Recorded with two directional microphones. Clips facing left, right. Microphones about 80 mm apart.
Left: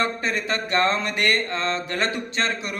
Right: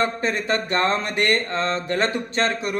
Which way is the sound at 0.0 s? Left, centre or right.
Right.